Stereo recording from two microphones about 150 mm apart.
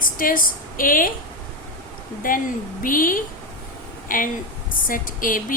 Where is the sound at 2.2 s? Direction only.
65° left (ahead or behind).